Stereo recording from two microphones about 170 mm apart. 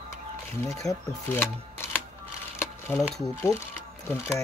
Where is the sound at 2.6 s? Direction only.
10° left (ahead or behind).